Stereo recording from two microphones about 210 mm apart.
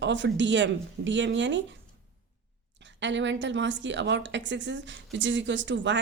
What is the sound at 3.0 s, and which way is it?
A woman's voice, 60° right (ahead or behind).